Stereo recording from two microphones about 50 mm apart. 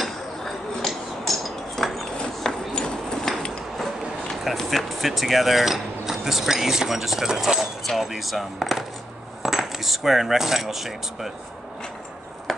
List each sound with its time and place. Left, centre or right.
0.0 s dishes: centre
2.1 s clip-clop: centre
2.7 s a sound: centre
4.5 s speech: centre